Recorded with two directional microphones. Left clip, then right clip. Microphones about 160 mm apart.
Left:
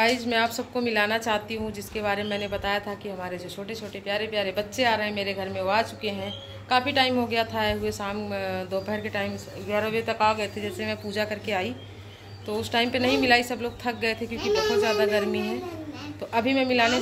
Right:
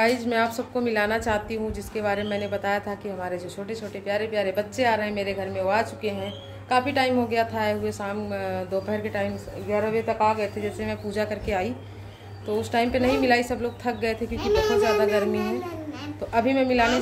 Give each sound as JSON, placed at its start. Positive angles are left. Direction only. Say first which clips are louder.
{"t": 0.0, "sound": "a woman's voice", "louder": "right 1 dB", "side_deg": -15}
{"t": 14.3, "sound": "speech", "louder": "right 3 dB", "side_deg": 10}
{"t": 14.8, "sound": "a woman's voice", "louder": "right 2 dB", "side_deg": -10}